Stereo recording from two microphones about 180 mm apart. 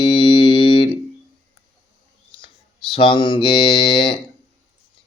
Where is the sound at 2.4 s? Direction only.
30° left (ahead or behind).